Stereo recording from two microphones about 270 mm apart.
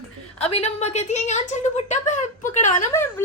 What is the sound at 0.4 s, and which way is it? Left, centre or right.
A woman's voice, left.